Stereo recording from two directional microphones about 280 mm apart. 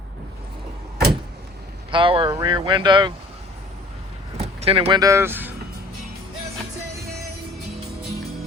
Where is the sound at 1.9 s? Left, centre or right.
Centre.